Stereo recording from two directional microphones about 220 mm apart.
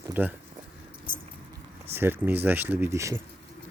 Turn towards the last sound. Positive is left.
turn(degrees=-15)  # may be behind; listen again after turning